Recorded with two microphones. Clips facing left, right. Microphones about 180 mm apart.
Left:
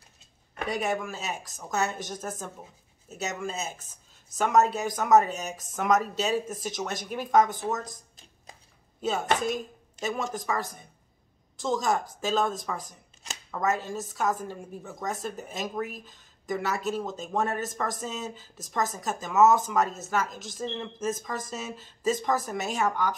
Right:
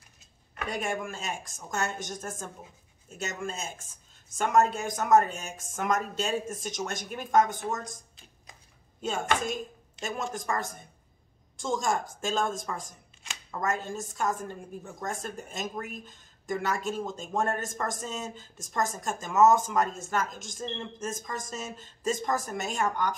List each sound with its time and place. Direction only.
0.7 s speech: 5° left (ahead or behind)
9.0 s speech: 5° left (ahead or behind)